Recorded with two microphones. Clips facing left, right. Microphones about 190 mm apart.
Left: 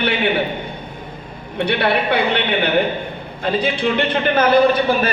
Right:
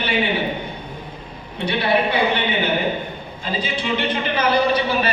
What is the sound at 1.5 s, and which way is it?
A man's voice, 60° left (ahead or behind).